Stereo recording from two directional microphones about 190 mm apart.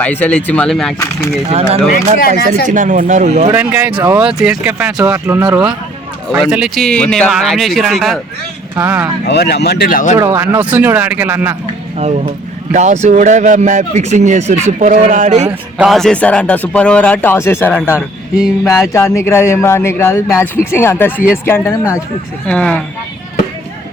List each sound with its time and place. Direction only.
0.0 s a man's voice: 10° left (ahead or behind)
2.6 s speech: 40° right (ahead or behind)
3.5 s speech: 10° right (ahead or behind)
8.7 s speech: 10° right (ahead or behind)
9.2 s speech: 60° left (ahead or behind); by 10.2 s 45° left (ahead or behind)
10.2 s speech: 10° right (ahead or behind)
11.9 s speech: 35° right (ahead or behind)
15.8 s a man's voice: centre (ahead or behind)
18.3 s speech: 5° right (ahead or behind)
18.9 s a man's voice: 15° left (ahead or behind)